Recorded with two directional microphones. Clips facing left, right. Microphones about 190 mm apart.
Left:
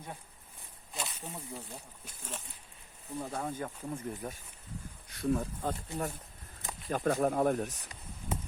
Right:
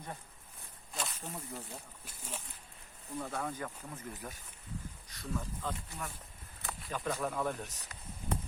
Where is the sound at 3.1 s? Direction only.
20° left (ahead or behind).